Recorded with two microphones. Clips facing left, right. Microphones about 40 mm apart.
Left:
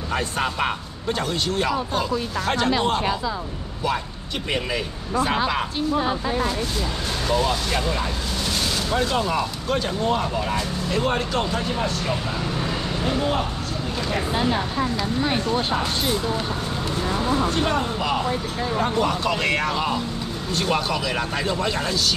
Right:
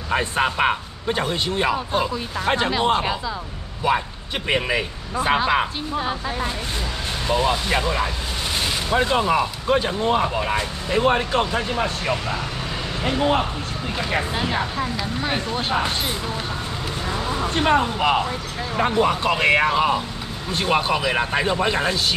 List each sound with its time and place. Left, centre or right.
0.1 s speech: right
4.5 s speech: right
5.9 s speech: centre
7.2 s speech: right
14.3 s speech: centre
15.7 s speech: right
17.6 s speech: right